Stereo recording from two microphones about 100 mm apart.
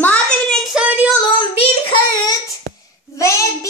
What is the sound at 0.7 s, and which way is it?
Child singing, 15° right (ahead or behind).